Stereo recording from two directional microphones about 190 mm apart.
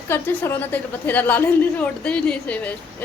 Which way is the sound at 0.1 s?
10° left (ahead or behind).